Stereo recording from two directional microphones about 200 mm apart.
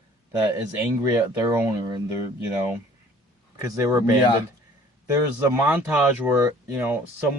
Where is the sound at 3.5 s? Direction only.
15° right (ahead or behind).